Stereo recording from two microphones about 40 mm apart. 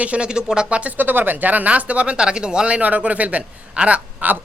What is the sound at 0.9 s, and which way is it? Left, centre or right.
Speech, right.